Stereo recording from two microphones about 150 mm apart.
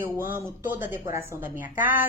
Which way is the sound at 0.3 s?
15° right (ahead or behind).